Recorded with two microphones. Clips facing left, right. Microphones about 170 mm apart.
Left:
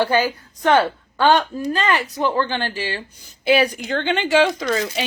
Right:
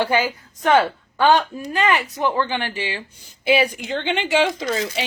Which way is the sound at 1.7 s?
20° right (ahead or behind).